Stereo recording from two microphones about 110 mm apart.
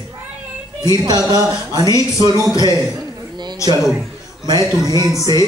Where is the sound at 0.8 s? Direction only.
35° right (ahead or behind).